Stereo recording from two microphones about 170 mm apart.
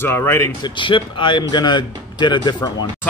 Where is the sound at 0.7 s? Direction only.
30° left (ahead or behind).